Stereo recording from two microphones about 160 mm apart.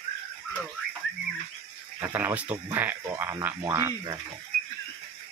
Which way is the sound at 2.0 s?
10° right (ahead or behind).